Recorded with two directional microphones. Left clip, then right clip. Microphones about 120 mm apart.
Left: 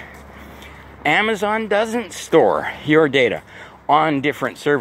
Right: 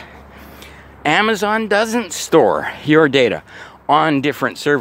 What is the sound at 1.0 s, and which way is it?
Speech, 60° right (ahead or behind).